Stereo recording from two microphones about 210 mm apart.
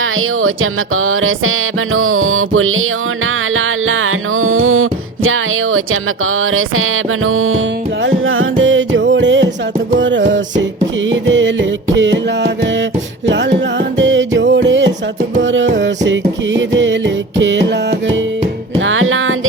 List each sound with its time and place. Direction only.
0.0 s music: 75° right (ahead or behind); by 18.2 s 60° right (ahead or behind)
18.8 s music: 70° right (ahead or behind)